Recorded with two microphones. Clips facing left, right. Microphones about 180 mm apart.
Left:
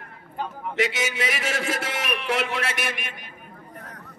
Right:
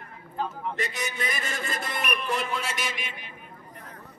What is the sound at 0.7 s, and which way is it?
A man's voice, 90° left.